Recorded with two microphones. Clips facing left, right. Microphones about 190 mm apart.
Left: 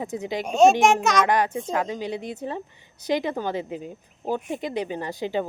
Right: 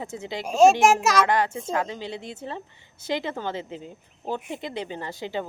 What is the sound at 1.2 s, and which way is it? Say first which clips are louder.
Speech: left 1 dB; 15° left (ahead or behind).